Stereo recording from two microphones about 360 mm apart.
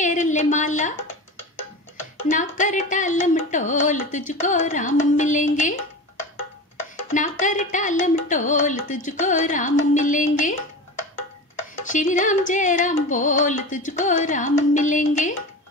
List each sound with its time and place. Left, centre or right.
0.0 s speech: left
2.2 s music: left
7.2 s music: left
11.8 s music: left